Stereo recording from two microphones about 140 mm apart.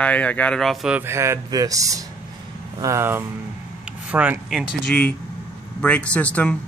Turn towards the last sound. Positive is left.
turn(degrees=10)  # may be behind; listen again after turning